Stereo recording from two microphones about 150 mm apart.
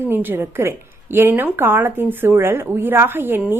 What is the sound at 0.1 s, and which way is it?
Speech, 15° right (ahead or behind).